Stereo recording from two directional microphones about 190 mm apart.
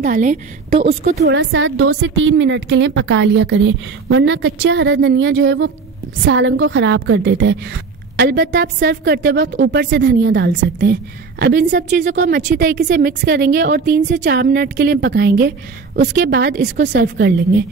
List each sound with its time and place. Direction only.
0.0 s a woman's voice: 45° right (ahead or behind)
0.7 s a woman's voice: 35° right (ahead or behind)
1.2 s a woman's voice: 75° right (ahead or behind)
8.2 s a woman's voice: 55° right (ahead or behind)
12.4 s a woman's voice: 50° right (ahead or behind)
16.9 s a woman's voice: 60° right (ahead or behind)